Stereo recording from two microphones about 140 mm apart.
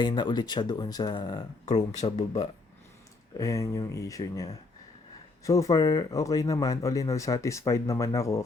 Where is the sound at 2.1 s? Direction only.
45° left (ahead or behind).